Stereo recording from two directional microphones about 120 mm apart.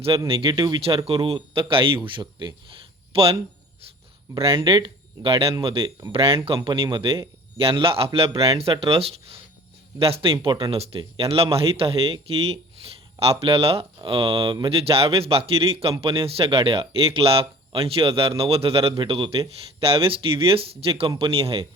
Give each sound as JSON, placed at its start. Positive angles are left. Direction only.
{"t": 0.3, "sound": "speech", "side_deg": -45}
{"t": 1.0, "sound": "speech", "side_deg": -55}
{"t": 4.4, "sound": "speech", "side_deg": -45}
{"t": 13.4, "sound": "speech", "side_deg": -50}